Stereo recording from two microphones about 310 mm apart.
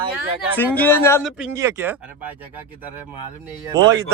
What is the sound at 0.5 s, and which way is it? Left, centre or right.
Speech, centre.